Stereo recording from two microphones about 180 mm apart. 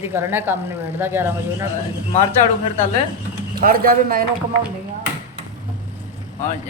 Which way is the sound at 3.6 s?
55° right (ahead or behind).